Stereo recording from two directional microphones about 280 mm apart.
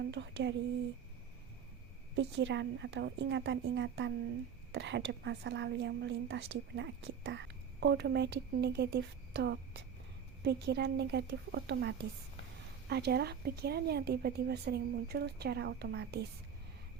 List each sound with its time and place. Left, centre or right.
0.1 s a woman's voice: right
2.1 s a woman's voice: right